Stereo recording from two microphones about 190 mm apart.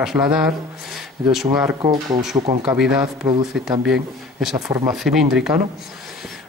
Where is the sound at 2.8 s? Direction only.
5° right (ahead or behind).